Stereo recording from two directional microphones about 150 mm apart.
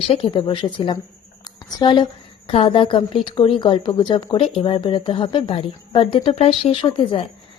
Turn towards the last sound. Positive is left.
turn(degrees=35)  # may be behind; listen again after turning